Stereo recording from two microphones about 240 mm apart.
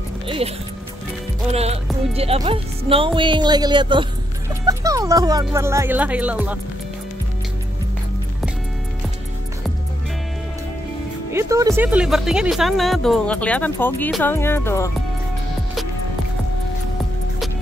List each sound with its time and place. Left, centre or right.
0.4 s speech: right; by 6.6 s centre
11.3 s speech: centre